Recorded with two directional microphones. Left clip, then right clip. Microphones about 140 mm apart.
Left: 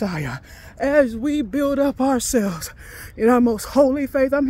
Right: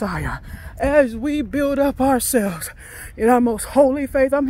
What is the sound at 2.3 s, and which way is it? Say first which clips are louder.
Speech: right 1 dB; 15° left (ahead or behind).